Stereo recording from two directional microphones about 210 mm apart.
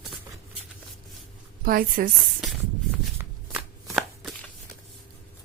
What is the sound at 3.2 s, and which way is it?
Chopping, 10° right (ahead or behind).